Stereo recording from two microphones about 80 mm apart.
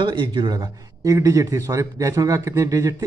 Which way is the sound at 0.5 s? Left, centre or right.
Right.